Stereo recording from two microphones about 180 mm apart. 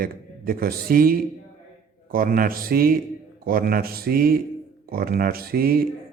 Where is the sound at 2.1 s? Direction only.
50° right (ahead or behind).